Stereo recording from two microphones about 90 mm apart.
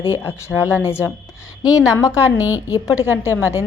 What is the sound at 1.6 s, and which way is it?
A woman's voice, 40° left (ahead or behind).